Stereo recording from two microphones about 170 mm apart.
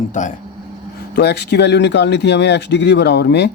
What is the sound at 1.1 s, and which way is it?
Speech, 75° left (ahead or behind).